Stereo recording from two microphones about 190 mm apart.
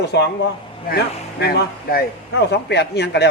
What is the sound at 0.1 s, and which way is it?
A man's voice, 60° left (ahead or behind).